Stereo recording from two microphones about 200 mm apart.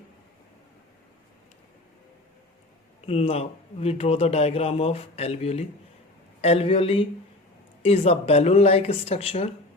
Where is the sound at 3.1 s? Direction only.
30° left (ahead or behind).